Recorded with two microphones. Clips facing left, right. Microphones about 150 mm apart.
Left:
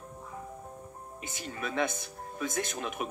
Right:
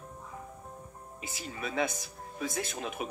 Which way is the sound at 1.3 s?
50° left (ahead or behind).